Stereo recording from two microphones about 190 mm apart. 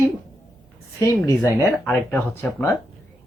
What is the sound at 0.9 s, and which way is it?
Speech, 15° left (ahead or behind).